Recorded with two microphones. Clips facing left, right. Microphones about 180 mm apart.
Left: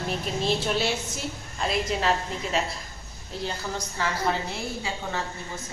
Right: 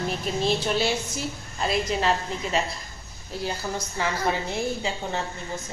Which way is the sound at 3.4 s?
10° right (ahead or behind).